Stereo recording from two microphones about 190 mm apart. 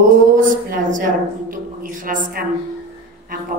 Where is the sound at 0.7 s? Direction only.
45° right (ahead or behind).